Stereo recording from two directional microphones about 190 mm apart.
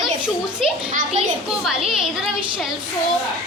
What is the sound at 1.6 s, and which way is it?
Speech, centre (ahead or behind).